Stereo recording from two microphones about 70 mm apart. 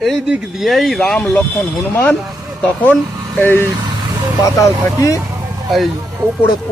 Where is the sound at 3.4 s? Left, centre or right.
Left.